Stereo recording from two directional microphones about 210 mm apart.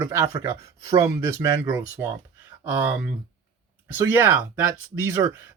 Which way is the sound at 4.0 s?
10° right (ahead or behind).